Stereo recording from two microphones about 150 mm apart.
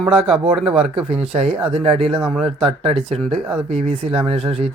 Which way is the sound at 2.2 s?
Centre (ahead or behind).